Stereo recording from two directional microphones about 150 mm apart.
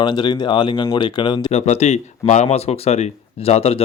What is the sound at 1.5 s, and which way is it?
Speech, 50° left (ahead or behind).